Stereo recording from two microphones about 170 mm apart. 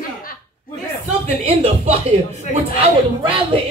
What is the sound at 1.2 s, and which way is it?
Speech, 35° right (ahead or behind).